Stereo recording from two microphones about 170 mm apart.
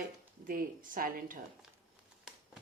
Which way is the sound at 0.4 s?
55° right (ahead or behind).